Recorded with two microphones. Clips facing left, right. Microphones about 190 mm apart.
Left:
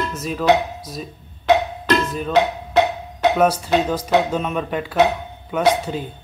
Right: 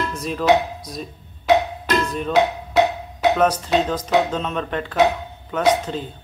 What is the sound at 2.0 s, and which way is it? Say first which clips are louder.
Speech: even; centre (ahead or behind).